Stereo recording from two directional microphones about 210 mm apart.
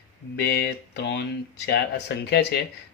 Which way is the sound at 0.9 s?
55° left (ahead or behind).